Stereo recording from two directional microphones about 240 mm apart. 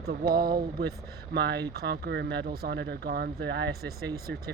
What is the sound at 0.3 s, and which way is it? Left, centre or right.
Speech, centre.